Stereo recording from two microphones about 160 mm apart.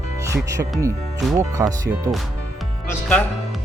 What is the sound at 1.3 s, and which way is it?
Speech, 20° right (ahead or behind).